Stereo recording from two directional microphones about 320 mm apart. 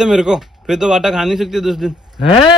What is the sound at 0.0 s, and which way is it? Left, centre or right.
Speech, centre.